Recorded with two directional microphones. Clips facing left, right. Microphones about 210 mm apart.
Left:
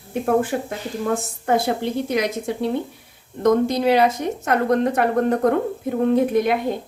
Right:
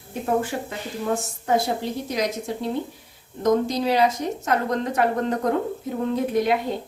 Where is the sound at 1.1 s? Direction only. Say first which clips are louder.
Left 1 dB; 60° left (ahead or behind).